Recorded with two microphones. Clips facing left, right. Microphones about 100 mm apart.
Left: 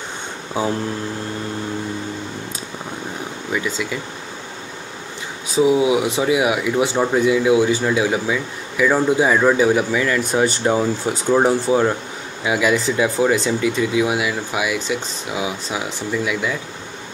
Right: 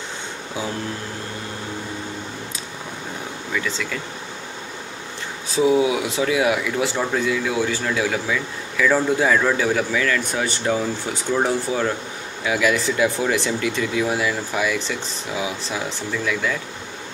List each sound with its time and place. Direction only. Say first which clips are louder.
3.5 s speech: left 3 dB; 10° left (ahead or behind)
5.6 s speech: left 2 dB; 20° left (ahead or behind)
12.4 s speech: left 2 dB; 5° left (ahead or behind)
12.9 s speech: left 3 dB; 20° left (ahead or behind)